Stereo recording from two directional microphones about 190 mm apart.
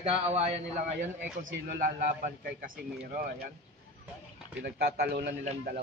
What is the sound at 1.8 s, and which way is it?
Speech, 50° right (ahead or behind).